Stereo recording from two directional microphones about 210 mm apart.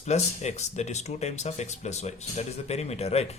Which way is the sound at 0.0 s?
30° left (ahead or behind).